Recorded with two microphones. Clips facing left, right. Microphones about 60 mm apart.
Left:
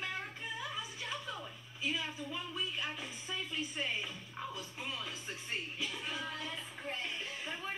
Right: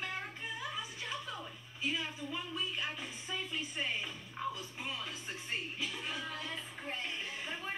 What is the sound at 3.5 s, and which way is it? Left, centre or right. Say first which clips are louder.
A woman's voice: left 1 dB; centre.